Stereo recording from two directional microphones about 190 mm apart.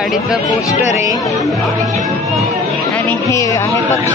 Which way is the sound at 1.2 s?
Centre (ahead or behind).